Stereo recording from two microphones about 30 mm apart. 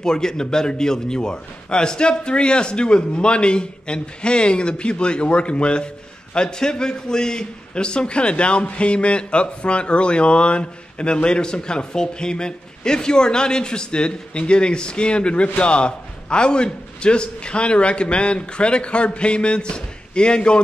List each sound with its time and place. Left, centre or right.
0.0 s a man's voice: left